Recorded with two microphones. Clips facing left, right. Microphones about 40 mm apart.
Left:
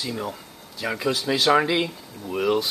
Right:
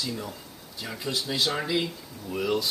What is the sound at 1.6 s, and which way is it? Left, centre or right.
Speech, left.